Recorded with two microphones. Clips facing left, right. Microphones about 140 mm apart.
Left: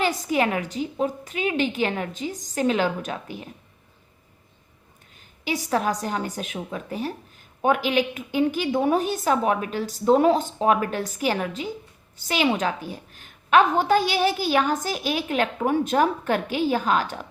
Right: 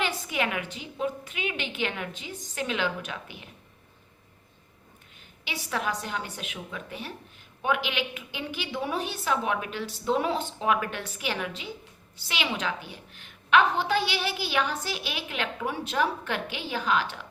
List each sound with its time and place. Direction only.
0.0 s a woman's voice: 40° left (ahead or behind)
5.5 s a woman's voice: 40° left (ahead or behind)